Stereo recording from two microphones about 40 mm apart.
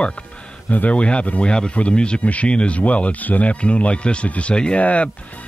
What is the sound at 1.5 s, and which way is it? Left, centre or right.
Speech, left.